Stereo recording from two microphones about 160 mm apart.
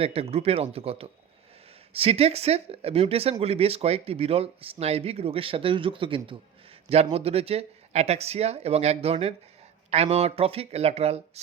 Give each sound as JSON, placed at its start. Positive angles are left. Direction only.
{"t": 0.0, "sound": "speech", "side_deg": -40}